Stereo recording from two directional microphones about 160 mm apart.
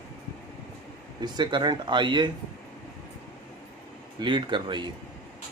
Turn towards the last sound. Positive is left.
turn(degrees=-30)  # may be behind; listen again after turning